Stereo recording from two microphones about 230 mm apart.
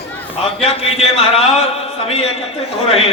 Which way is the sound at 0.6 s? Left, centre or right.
Left.